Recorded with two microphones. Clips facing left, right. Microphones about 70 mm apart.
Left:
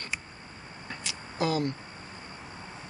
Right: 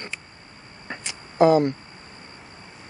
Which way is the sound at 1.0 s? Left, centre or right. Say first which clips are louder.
Right 13 dB; right.